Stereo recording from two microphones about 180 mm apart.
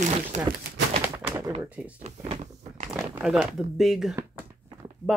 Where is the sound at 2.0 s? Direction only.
40° right (ahead or behind).